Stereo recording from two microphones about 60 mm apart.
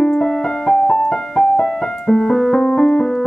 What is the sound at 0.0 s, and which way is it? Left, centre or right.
Music, centre.